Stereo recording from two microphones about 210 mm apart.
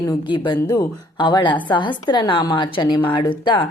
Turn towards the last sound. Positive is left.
turn(degrees=20)  # may be behind; listen again after turning